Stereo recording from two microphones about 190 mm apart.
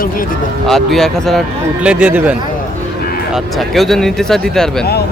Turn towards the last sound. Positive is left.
turn(degrees=5)  # may be behind; listen again after turning